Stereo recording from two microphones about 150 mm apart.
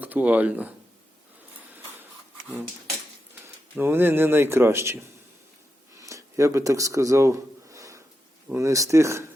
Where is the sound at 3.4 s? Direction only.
15° right (ahead or behind).